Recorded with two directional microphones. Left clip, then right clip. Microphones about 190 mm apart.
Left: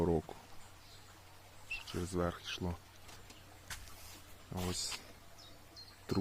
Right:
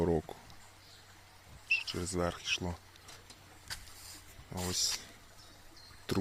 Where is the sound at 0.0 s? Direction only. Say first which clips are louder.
Right 2 dB; 15° right (ahead or behind).